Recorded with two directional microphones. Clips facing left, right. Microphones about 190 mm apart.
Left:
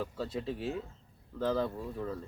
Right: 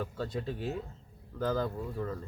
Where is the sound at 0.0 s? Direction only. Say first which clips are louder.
Even; 5° left (ahead or behind).